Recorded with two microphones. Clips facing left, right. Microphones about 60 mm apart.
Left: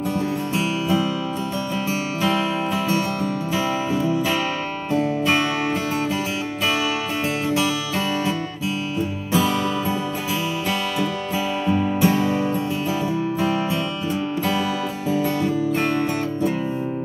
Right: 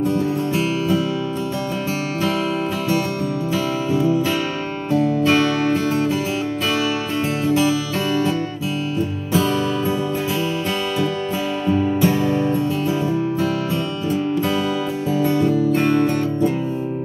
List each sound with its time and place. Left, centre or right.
4.9 s music: left
11.6 s music: centre
15.7 s music: centre